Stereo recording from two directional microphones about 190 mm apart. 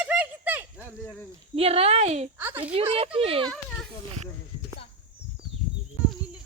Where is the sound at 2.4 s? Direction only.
10° right (ahead or behind).